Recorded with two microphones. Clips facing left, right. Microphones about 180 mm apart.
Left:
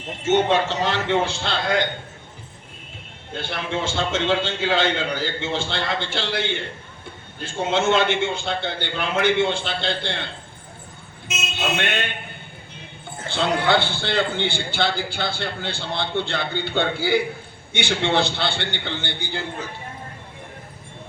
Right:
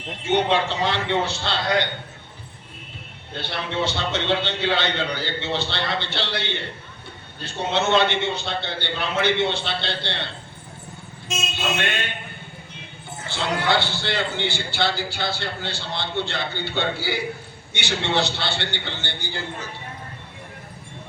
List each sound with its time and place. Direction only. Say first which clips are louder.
0.2 s a man's voice: left 2 dB; 45° left (ahead or behind)
3.3 s a man's voice: even; 50° left (ahead or behind)
13.2 s a man's voice: left 3 dB; 55° left (ahead or behind)